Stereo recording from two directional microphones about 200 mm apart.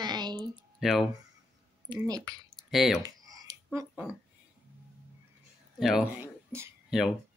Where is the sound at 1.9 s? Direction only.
20° right (ahead or behind).